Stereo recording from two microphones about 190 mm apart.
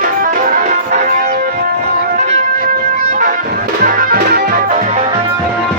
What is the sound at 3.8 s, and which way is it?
Music, 50° right (ahead or behind).